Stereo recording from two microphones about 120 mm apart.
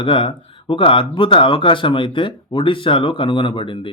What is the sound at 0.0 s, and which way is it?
A man's voice, 45° left (ahead or behind).